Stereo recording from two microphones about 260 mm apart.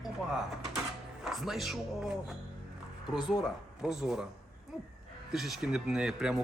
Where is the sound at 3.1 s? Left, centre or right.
Centre.